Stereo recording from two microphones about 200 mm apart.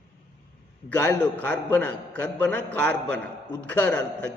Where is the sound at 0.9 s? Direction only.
10° left (ahead or behind).